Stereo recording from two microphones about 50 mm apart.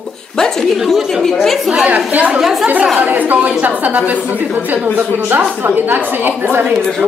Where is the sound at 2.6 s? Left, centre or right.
Right.